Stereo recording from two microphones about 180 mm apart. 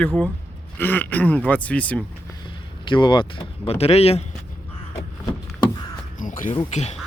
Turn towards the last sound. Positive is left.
turn(degrees=40)  # may be behind; listen again after turning